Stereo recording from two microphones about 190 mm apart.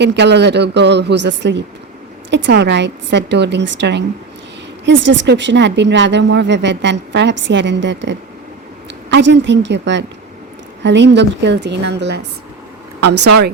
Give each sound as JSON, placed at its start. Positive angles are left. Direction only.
{"t": 0.0, "sound": "a woman's voice", "side_deg": -65}